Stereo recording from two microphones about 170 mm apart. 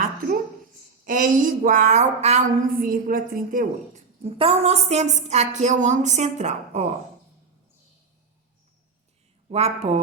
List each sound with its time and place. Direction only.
1.0 s a woman's voice: 50° right (ahead or behind)
4.2 s a woman's voice: 35° right (ahead or behind)
9.5 s a woman's voice: 40° right (ahead or behind)